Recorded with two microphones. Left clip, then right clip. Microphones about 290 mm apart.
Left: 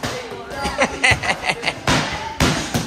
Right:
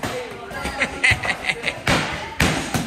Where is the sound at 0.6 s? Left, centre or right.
Centre.